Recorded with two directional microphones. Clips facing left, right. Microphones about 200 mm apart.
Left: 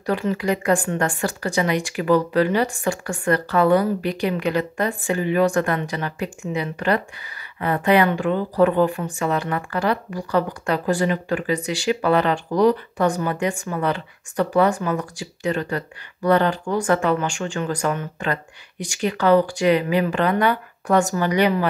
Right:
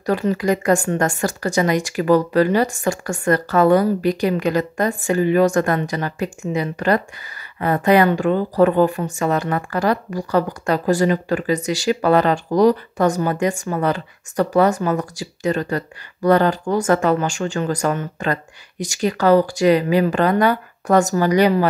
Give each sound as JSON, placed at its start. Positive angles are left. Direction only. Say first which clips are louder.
{"t": 0.0, "sound": "speech", "louder": "right 3 dB", "side_deg": -40}